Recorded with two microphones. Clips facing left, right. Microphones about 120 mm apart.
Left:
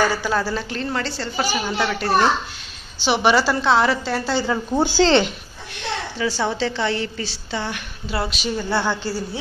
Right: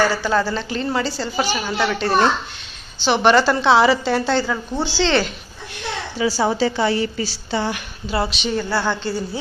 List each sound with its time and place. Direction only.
0.0 s a woman's voice: 15° left (ahead or behind)
4.4 s a woman's voice: 20° left (ahead or behind)
4.8 s a woman's voice: 50° left (ahead or behind)
6.1 s a woman's voice: 10° right (ahead or behind); by 9.4 s 10° left (ahead or behind)